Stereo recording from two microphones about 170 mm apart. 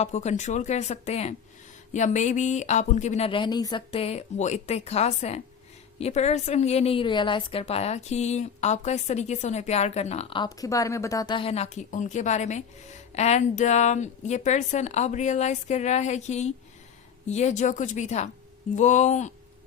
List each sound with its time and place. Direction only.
0.0 s a woman's voice: 45° left (ahead or behind)